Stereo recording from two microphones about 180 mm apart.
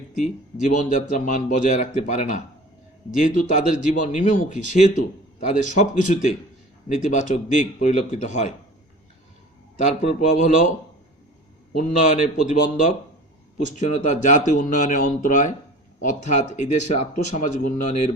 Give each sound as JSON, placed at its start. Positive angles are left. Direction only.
{"t": 0.1, "sound": "a man's voice", "side_deg": 45}
{"t": 9.8, "sound": "speech", "side_deg": 40}
{"t": 11.8, "sound": "a man's voice", "side_deg": 45}